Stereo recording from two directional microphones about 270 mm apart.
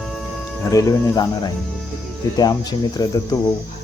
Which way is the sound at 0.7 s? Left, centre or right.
Centre.